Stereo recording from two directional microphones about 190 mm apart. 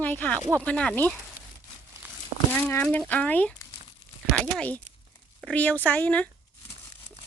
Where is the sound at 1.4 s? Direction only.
50° left (ahead or behind).